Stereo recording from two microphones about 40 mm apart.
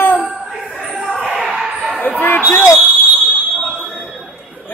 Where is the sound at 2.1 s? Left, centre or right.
Left.